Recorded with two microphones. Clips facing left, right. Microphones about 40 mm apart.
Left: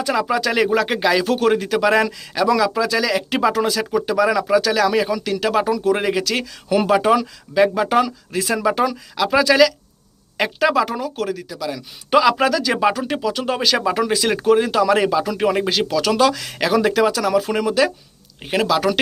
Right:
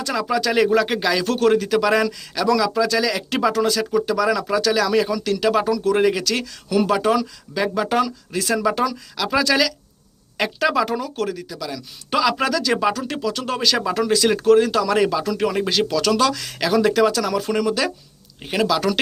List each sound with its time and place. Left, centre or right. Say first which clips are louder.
0.0 s speech: left 2 dB; centre
8.8 s speech: left 3 dB; left